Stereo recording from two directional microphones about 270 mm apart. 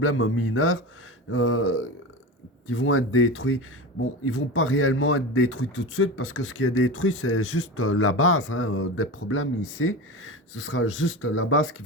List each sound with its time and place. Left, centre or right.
0.0 s a man's voice: left